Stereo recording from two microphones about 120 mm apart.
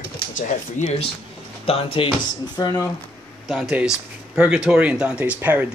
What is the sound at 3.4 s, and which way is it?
Speech, centre (ahead or behind).